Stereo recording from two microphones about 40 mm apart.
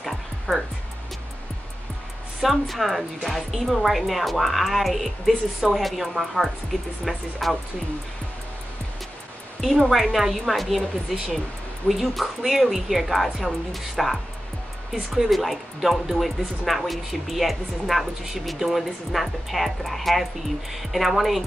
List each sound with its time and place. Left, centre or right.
0.5 s speech: left
2.4 s speech: centre
9.8 s speech: centre
15.1 s speech: centre